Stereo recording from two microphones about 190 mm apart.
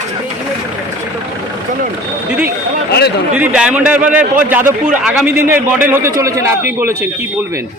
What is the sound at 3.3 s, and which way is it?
A man's voice, 10° right (ahead or behind).